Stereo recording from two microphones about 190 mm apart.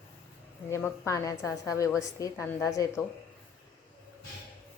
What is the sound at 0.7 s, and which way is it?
A woman's voice, 15° left (ahead or behind).